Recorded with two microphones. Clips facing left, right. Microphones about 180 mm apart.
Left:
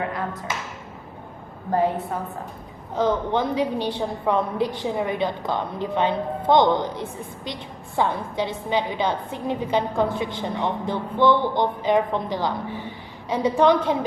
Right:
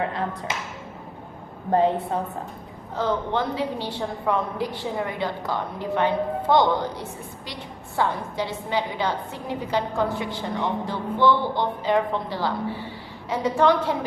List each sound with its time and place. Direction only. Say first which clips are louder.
0.0 s speech: right 1 dB; 25° right (ahead or behind)
1.7 s speech: right 2 dB; 25° right (ahead or behind)
2.9 s a woman's voice: left 3 dB; 15° left (ahead or behind)